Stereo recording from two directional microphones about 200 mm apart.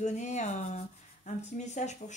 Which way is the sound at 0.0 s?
35° left (ahead or behind).